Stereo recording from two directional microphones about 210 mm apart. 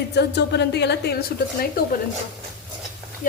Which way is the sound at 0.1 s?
55° left (ahead or behind).